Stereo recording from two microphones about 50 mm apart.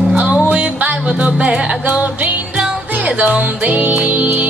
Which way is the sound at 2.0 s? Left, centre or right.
Right.